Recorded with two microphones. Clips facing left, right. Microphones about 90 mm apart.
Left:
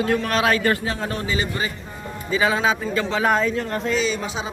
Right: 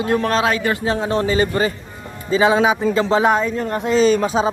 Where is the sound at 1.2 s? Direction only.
40° right (ahead or behind).